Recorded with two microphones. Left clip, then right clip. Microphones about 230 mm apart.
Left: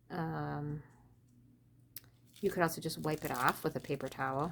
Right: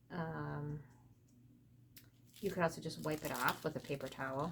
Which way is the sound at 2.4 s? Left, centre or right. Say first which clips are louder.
Left 4 dB; left.